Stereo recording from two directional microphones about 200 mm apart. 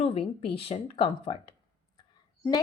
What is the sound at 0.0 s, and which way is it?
A woman's voice, 30° left (ahead or behind).